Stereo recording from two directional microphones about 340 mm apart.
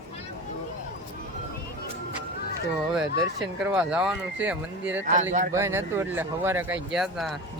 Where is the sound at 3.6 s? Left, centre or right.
Centre.